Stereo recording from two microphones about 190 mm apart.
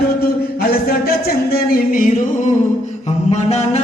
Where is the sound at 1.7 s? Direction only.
45° left (ahead or behind).